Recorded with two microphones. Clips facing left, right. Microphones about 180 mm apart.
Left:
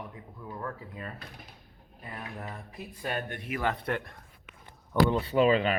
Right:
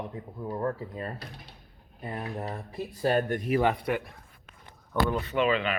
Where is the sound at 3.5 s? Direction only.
15° right (ahead or behind).